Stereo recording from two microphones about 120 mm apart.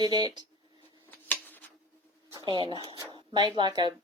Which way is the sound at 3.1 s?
40° right (ahead or behind).